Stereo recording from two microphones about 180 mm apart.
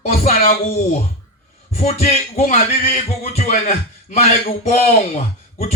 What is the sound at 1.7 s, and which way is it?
A man's voice, 40° left (ahead or behind).